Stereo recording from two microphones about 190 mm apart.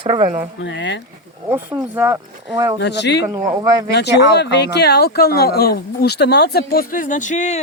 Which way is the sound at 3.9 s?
60° left (ahead or behind).